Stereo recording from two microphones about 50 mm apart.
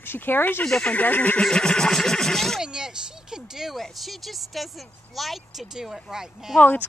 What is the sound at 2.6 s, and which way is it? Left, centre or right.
Speech, centre.